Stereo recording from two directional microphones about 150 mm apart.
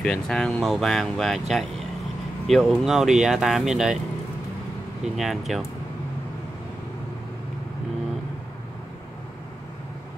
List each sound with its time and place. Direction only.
0.0 s speech: 5° left (ahead or behind)
5.0 s speech: centre (ahead or behind)